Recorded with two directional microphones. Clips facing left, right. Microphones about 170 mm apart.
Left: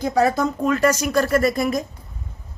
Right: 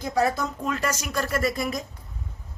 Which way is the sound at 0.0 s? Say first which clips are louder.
Left 5 dB; 70° left (ahead or behind).